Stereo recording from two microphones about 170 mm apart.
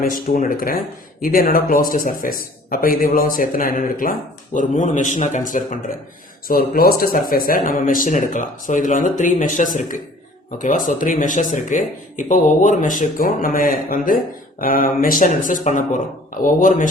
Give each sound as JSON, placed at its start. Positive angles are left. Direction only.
{"t": 0.0, "sound": "speech", "side_deg": 55}
{"t": 6.5, "sound": "speech", "side_deg": 60}